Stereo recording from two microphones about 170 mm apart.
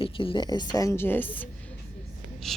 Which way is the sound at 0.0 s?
30° left (ahead or behind).